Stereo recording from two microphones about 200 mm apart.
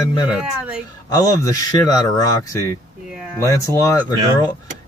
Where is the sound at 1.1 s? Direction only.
15° left (ahead or behind).